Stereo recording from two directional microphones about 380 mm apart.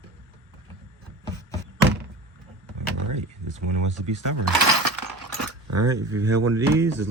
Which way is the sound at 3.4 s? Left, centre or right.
Right.